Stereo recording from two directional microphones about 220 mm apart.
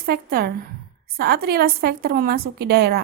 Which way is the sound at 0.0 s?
45° right (ahead or behind).